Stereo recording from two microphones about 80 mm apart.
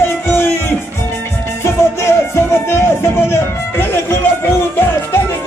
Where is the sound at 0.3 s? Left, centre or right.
Left.